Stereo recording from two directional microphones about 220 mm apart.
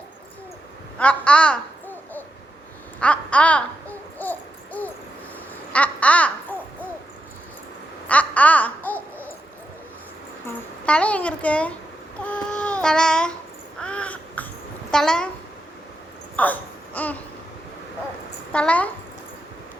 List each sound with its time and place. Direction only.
0.9 s a sound: 5° left (ahead or behind)
3.0 s babbling: 5° left (ahead or behind)
8.0 s babbling: 5° left (ahead or behind)
10.8 s a child's voice: 5° left (ahead or behind)
12.2 s child singing: 5° left (ahead or behind)
13.7 s crow: 5° left (ahead or behind)
14.8 s a woman's voice: 5° left (ahead or behind)
16.3 s a sound: 5° left (ahead or behind)
18.5 s a child's voice: 5° left (ahead or behind)